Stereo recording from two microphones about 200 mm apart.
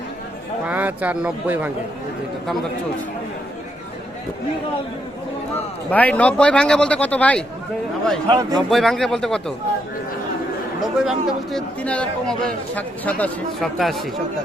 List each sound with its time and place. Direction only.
0.7 s speech: 10° right (ahead or behind)
5.9 s a man's voice: 5° left (ahead or behind)
8.3 s a man's voice: 20° right (ahead or behind)
8.7 s a man's voice: centre (ahead or behind)
11.0 s a man's voice: centre (ahead or behind)